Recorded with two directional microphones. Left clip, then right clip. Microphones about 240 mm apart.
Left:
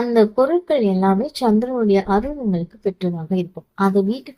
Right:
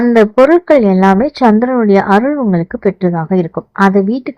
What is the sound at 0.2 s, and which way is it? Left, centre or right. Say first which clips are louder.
Speech: right 8 dB; right.